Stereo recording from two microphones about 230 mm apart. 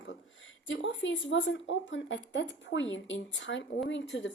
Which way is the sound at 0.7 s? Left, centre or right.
Left.